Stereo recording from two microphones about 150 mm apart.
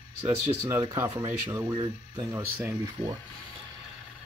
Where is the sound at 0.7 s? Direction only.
20° right (ahead or behind).